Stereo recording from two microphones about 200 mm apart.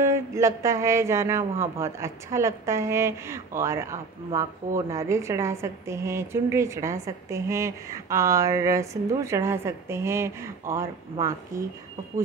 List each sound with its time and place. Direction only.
0.0 s speech: 15° right (ahead or behind)